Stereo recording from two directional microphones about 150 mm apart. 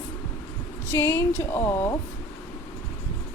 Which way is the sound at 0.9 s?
15° left (ahead or behind).